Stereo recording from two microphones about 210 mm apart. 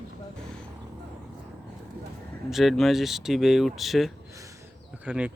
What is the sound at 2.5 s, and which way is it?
Speech, centre (ahead or behind).